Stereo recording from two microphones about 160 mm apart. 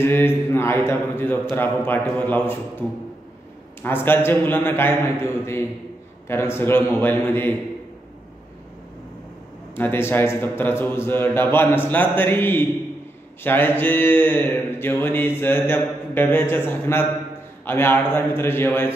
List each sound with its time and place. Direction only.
0.0 s mantra: 15° left (ahead or behind)
3.8 s mantra: 15° left (ahead or behind)
9.8 s mantra: 15° left (ahead or behind)